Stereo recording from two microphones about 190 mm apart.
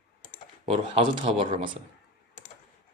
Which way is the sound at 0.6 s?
30° right (ahead or behind).